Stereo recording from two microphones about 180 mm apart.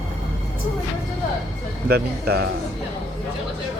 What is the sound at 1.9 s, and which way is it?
Speech, 60° right (ahead or behind).